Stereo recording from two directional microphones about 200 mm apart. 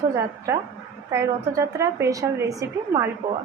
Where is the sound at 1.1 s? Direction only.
15° right (ahead or behind).